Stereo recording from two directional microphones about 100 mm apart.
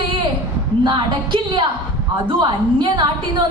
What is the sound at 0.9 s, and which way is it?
A woman's voice, 55° right (ahead or behind).